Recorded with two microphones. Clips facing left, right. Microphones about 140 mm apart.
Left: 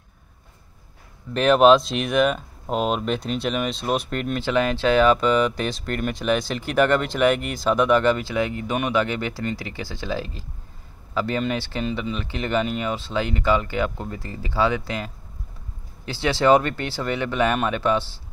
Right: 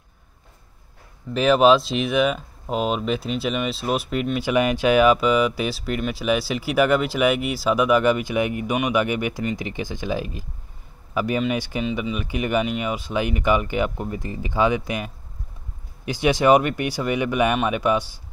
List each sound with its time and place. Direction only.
1.3 s speech: centre (ahead or behind)
16.1 s speech: 15° right (ahead or behind)